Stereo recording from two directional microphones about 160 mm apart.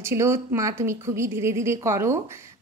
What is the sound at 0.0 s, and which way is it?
A woman's voice, 15° right (ahead or behind).